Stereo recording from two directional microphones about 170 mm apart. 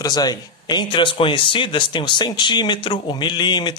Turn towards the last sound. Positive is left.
turn(degrees=25)  # may be behind; listen again after turning